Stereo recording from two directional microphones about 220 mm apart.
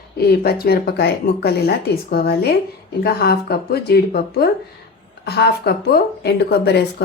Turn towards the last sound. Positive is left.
turn(degrees=50)  # may be behind; listen again after turning